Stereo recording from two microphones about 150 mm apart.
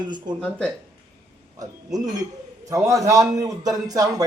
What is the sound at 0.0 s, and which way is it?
Speech, 30° right (ahead or behind).